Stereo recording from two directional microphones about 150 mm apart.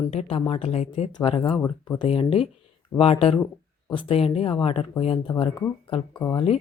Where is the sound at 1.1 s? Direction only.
30° left (ahead or behind).